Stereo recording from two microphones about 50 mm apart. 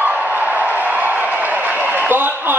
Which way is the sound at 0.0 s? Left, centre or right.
Right.